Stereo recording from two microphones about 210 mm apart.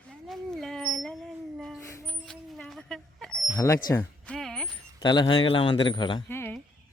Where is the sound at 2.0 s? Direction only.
5° left (ahead or behind).